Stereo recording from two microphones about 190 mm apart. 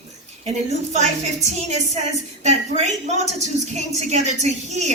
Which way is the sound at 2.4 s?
35° right (ahead or behind).